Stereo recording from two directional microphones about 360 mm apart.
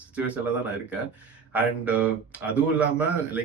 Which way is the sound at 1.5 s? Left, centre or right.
Centre.